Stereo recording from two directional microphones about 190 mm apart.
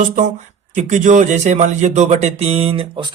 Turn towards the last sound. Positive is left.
turn(degrees=-25)  # may be behind; listen again after turning